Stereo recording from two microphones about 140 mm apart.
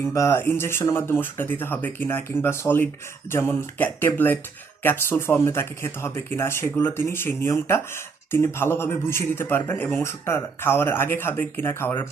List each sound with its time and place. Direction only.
0.0 s speech: 20° left (ahead or behind)